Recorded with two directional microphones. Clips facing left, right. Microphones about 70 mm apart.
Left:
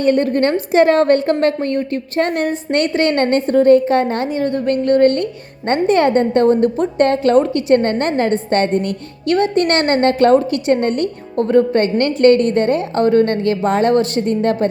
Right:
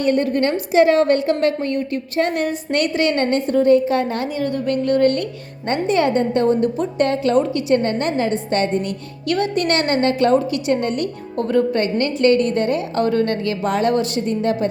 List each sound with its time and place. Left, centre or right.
0.0 s a woman's voice: left
9.2 s a woman's voice: left